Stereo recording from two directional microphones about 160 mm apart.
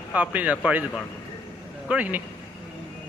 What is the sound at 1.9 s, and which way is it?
Speech, 10° right (ahead or behind).